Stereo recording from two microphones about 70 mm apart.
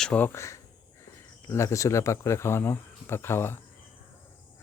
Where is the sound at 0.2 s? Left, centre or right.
Left.